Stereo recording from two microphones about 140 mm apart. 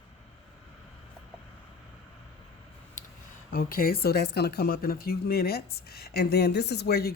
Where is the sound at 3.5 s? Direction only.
90° left.